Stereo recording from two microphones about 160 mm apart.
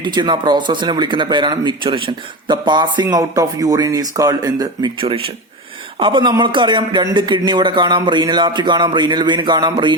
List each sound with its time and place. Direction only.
0.0 s speech: 30° right (ahead or behind)